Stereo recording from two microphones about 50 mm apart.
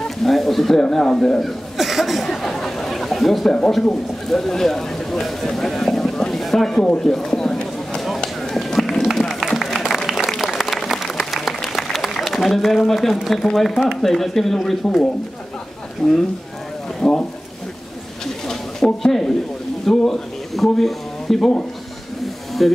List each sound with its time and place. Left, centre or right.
0.2 s speech: centre
1.8 s chuckle: centre
2.2 s a sound: centre
3.8 s speech: centre
6.4 s a sound: centre
8.4 s run: centre
10.0 s applause: centre
10.6 s a sound: centre
13.6 s speech: centre
18.2 s a sound: centre
19.9 s speech: centre
22.2 s snake: centre